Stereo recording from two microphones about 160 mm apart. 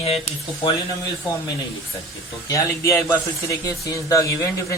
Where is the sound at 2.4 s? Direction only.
20° left (ahead or behind).